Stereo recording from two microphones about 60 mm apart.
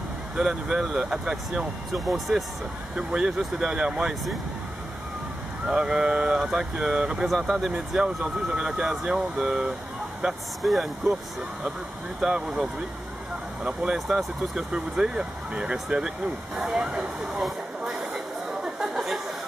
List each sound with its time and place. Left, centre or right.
0.4 s speech: centre
3.0 s speech: centre
5.7 s speech: centre
12.4 s speech: right
13.7 s speech: centre
16.7 s vehicle: centre